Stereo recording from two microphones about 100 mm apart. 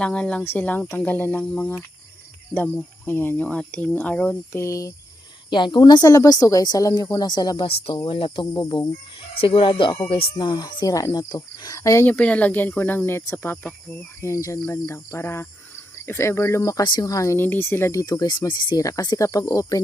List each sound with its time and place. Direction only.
0.0 s speech: 10° left (ahead or behind)
4.5 s a woman's voice: 30° left (ahead or behind)
5.5 s speech: 50° left (ahead or behind)
6.1 s a woman's voice: 35° left (ahead or behind)
7.9 s speech: 60° left (ahead or behind); by 8.9 s 45° left (ahead or behind)
9.4 s speech: 65° left (ahead or behind)
10.2 s speech: 70° left (ahead or behind)
10.4 s a woman's voice: 45° left (ahead or behind)
12.0 s a woman's voice: 15° left (ahead or behind); by 16.8 s 30° left (ahead or behind)
16.8 s speech: 50° left (ahead or behind)
17.1 s speech: 30° left (ahead or behind)
18.0 s a woman's voice: 40° left (ahead or behind)
18.3 s speech: 50° left (ahead or behind)
18.8 s a woman's voice: 40° left (ahead or behind)